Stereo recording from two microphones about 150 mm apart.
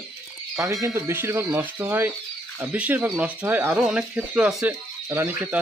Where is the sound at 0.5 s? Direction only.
20° right (ahead or behind).